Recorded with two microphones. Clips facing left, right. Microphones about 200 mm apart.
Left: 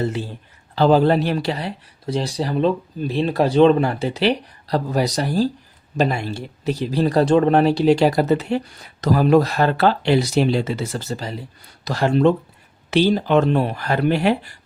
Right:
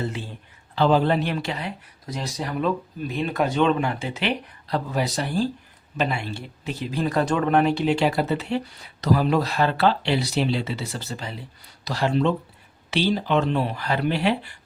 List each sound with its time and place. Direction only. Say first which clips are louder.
0.0 s speech: left 6 dB; 35° left (ahead or behind)